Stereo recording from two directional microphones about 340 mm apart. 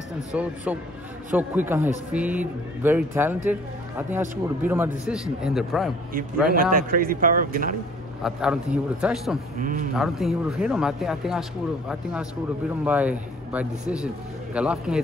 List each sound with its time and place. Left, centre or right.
0.3 s a man's voice: centre
6.1 s speech: right
8.2 s a man's voice: centre
9.6 s speech: right
9.9 s a man's voice: centre